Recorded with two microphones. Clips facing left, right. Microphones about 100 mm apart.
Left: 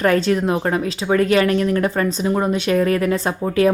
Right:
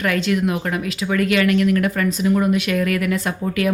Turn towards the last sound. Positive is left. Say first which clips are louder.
# left 4 dB
turn(degrees=30)  # may be behind; listen again after turning